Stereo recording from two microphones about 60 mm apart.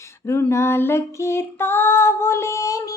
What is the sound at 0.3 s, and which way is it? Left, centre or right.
Female singing, left.